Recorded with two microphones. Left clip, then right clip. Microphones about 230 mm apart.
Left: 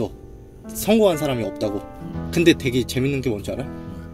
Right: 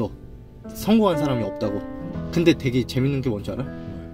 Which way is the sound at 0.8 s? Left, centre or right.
Right.